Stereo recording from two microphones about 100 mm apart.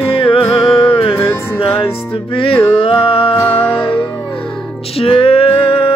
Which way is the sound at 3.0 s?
65° left (ahead or behind).